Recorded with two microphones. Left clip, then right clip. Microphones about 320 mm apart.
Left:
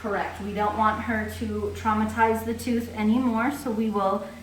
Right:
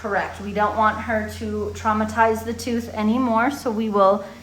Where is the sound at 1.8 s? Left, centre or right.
Right.